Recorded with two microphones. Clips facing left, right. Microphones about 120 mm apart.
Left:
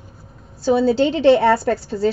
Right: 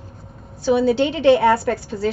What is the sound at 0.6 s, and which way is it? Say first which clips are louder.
A woman's voice: left 1 dB; 30° left (ahead or behind).